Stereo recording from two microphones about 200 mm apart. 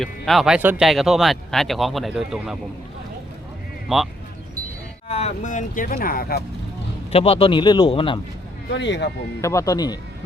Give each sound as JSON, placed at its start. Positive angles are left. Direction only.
{"t": 0.0, "sound": "speech", "side_deg": 0}
{"t": 3.8, "sound": "speech", "side_deg": 0}
{"t": 5.0, "sound": "speech", "side_deg": 30}
{"t": 7.1, "sound": "speech", "side_deg": 30}
{"t": 8.7, "sound": "speech", "side_deg": 60}
{"t": 9.4, "sound": "speech", "side_deg": 15}